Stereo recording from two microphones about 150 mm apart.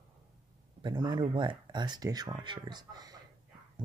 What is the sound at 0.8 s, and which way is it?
Speech, 30° right (ahead or behind).